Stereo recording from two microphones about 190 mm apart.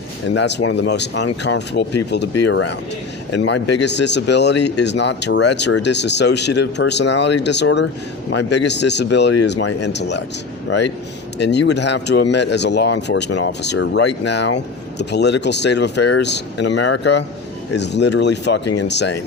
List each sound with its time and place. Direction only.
0.3 s speech: 65° left (ahead or behind)
2.4 s speech: 80° left
3.3 s speech: 65° left (ahead or behind)
11.3 s speech: 65° left (ahead or behind)